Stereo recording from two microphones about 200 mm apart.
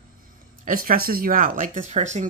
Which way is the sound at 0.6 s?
45° right (ahead or behind).